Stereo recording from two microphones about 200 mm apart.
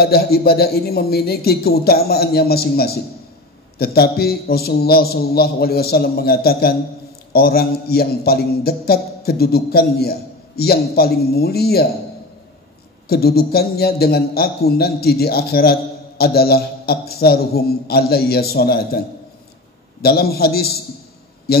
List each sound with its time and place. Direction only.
0.0 s a man's voice: 50° left (ahead or behind)
13.1 s a man's voice: 50° left (ahead or behind)